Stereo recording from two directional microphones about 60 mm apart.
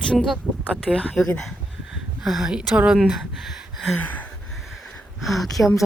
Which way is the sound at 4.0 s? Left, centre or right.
Left.